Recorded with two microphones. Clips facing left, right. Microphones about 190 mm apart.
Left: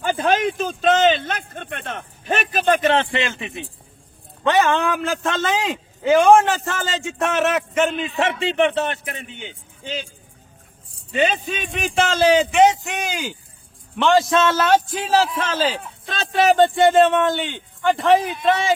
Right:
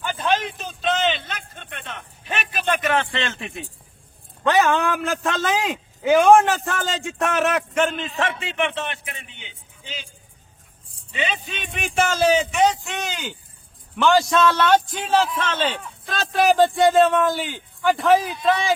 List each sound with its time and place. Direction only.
0.0 s speech: 45° left (ahead or behind); by 3.3 s 15° left (ahead or behind)
3.3 s a man's voice: centre (ahead or behind)
8.2 s a man's voice: 25° left (ahead or behind); by 10.0 s 45° left (ahead or behind)
11.1 s a man's voice: 45° left (ahead or behind)
12.8 s a man's voice: 10° left (ahead or behind)